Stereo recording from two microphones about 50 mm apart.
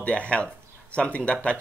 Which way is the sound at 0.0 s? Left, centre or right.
Left.